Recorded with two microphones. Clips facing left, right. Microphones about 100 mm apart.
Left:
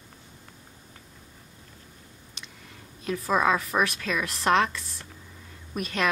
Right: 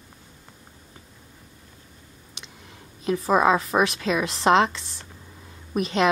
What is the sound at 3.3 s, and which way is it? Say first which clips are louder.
Speech: right 4 dB; 20° right (ahead or behind).